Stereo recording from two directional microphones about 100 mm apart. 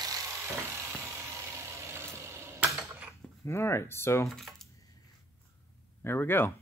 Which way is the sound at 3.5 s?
25° left (ahead or behind).